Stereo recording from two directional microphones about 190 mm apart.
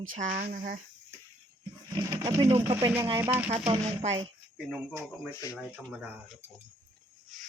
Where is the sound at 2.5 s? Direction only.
15° right (ahead or behind).